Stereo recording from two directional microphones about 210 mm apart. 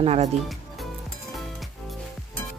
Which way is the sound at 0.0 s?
30° right (ahead or behind).